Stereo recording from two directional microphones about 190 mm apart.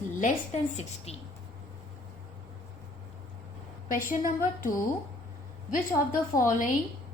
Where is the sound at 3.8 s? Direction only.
45° left (ahead or behind).